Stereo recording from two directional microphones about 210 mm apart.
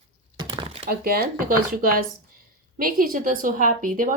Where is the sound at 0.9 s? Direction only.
45° right (ahead or behind).